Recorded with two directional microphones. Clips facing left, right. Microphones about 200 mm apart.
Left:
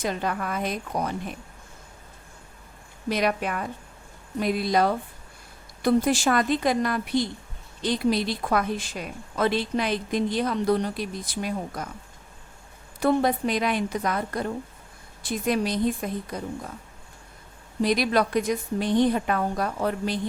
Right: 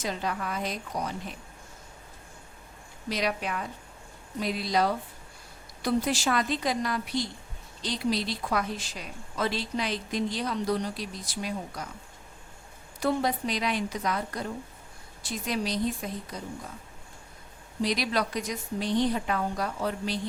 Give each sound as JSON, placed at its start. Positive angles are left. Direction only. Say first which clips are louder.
{"t": 0.0, "sound": "a woman's voice", "louder": "left 4 dB", "side_deg": 55}
{"t": 3.1, "sound": "a woman's voice", "louder": "left 5 dB", "side_deg": 55}
{"t": 13.0, "sound": "a woman's voice", "louder": "left 5 dB", "side_deg": 55}
{"t": 17.8, "sound": "a woman's voice", "louder": "left 6 dB", "side_deg": 55}